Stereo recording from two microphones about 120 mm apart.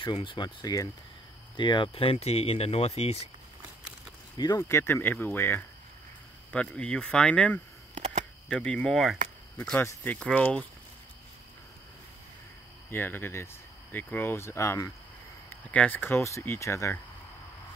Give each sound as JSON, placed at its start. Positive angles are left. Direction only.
{"t": 0.0, "sound": "speech", "side_deg": 45}
{"t": 4.4, "sound": "speech", "side_deg": 30}
{"t": 7.9, "sound": "a sound", "side_deg": -80}
{"t": 8.5, "sound": "speech", "side_deg": 5}
{"t": 9.6, "sound": "speech", "side_deg": 10}
{"t": 12.9, "sound": "speech", "side_deg": 15}
{"t": 15.5, "sound": "speech", "side_deg": 15}